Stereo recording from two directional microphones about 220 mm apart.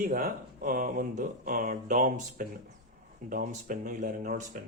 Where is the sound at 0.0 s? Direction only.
40° right (ahead or behind).